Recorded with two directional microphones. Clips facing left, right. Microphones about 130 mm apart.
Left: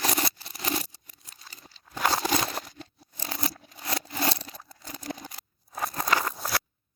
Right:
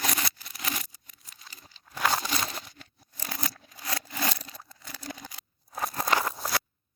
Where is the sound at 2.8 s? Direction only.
30° left (ahead or behind).